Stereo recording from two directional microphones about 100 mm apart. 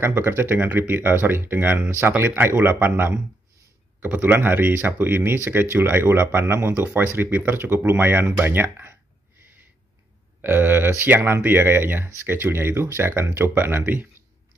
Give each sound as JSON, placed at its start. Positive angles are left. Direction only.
{"t": 0.0, "sound": "speech", "side_deg": -25}
{"t": 10.4, "sound": "speech", "side_deg": -20}